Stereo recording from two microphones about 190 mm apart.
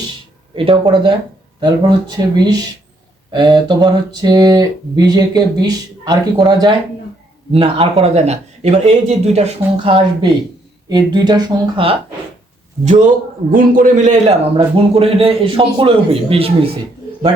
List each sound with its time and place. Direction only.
0.5 s speech: 25° right (ahead or behind)
13.5 s a man's voice: 45° right (ahead or behind)
14.5 s speech: 30° right (ahead or behind)